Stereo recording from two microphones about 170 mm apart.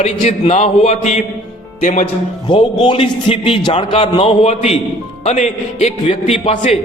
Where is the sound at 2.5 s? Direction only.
25° left (ahead or behind).